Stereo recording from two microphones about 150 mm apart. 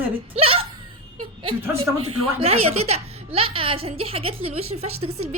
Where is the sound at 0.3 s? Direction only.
40° right (ahead or behind).